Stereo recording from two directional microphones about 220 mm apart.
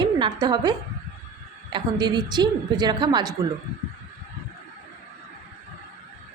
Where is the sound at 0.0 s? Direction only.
20° right (ahead or behind).